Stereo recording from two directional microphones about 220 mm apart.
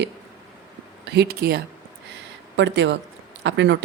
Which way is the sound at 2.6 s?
55° right (ahead or behind).